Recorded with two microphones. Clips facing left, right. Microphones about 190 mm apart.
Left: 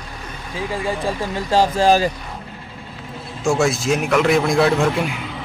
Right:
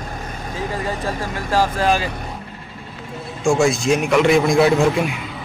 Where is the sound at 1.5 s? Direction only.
25° left (ahead or behind).